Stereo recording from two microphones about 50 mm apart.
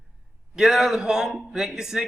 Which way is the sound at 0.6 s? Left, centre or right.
Centre.